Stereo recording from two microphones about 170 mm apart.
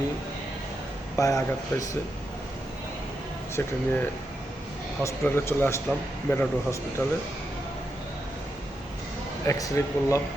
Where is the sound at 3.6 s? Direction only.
10° left (ahead or behind).